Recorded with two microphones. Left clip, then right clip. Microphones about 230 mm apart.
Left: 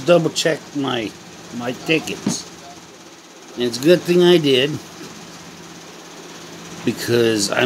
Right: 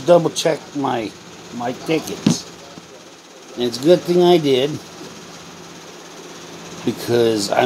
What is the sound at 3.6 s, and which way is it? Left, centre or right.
Speech, centre.